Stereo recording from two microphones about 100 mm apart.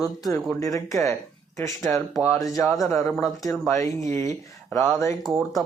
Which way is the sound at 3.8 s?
30° left (ahead or behind).